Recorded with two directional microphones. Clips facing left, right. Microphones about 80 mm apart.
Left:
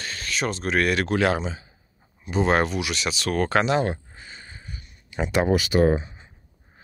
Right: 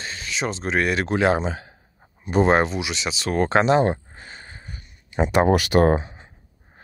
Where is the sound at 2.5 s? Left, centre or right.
Right.